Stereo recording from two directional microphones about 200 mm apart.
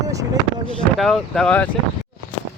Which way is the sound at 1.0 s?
Centre (ahead or behind).